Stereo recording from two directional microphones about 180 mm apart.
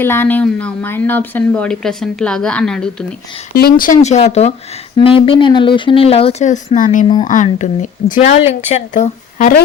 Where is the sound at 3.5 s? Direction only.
55° left (ahead or behind).